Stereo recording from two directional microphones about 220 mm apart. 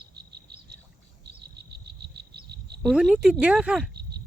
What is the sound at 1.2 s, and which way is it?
Frog, 50° right (ahead or behind).